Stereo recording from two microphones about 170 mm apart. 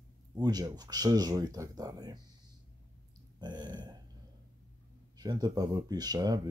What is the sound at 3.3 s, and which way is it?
Speech, 25° right (ahead or behind).